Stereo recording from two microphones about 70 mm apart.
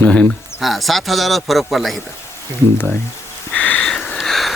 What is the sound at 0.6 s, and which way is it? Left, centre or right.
Speech, centre.